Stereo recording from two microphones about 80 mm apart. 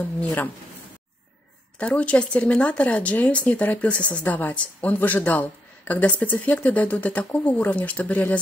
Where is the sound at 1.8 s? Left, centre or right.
Centre.